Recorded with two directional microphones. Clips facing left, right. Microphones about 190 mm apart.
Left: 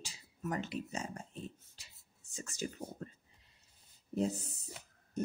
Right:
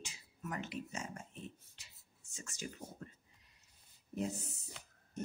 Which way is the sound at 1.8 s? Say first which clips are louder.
Left 2 dB; 35° left (ahead or behind).